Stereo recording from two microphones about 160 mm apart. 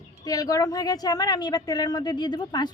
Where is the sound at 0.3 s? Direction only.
25° left (ahead or behind).